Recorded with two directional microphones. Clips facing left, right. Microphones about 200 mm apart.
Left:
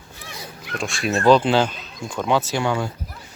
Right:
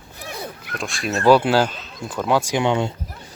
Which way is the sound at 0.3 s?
55° right (ahead or behind).